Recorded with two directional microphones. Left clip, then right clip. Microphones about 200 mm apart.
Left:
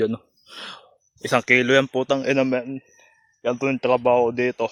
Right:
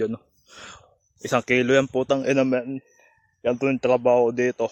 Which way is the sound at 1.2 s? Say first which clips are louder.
Left 3 dB; 10° left (ahead or behind).